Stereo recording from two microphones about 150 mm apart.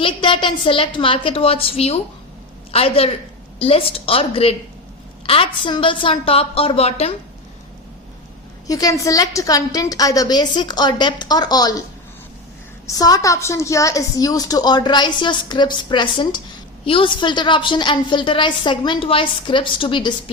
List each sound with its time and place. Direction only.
0.0 s a woman's voice: 35° left (ahead or behind)
8.6 s a woman's voice: 25° left (ahead or behind)
13.0 s a woman's voice: 25° left (ahead or behind)